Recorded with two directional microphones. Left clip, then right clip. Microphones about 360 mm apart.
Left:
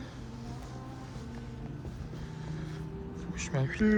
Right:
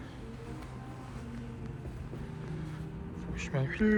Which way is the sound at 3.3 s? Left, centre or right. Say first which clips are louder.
Left 1 dB; centre.